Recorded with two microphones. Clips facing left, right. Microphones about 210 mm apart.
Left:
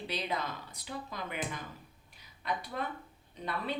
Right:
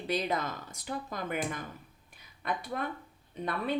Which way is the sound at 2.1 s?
50° right (ahead or behind).